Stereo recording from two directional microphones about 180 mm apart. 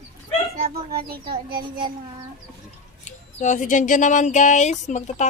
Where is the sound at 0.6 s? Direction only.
55° right (ahead or behind).